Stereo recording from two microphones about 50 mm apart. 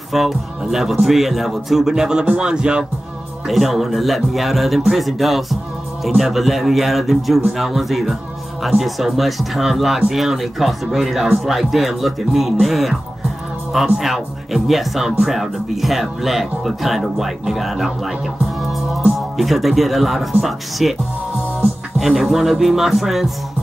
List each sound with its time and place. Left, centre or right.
0.1 s speech: centre
3.4 s speech: centre
21.5 s music: centre